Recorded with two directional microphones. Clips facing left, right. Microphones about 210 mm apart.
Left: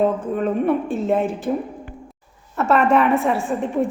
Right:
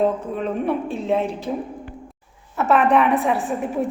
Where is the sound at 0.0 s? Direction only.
Centre (ahead or behind).